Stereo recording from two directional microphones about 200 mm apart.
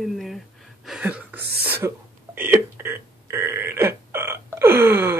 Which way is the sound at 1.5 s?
50° right (ahead or behind).